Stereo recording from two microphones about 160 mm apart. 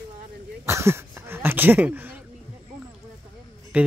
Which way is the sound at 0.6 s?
15° right (ahead or behind).